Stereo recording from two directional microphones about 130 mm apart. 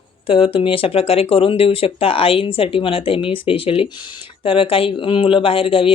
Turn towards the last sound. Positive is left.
turn(degrees=45)  # may be behind; listen again after turning